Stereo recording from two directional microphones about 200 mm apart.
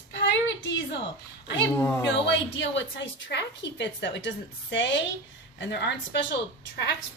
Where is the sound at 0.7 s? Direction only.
65° left (ahead or behind).